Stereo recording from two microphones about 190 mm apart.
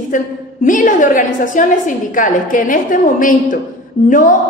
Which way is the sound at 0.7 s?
45° left (ahead or behind).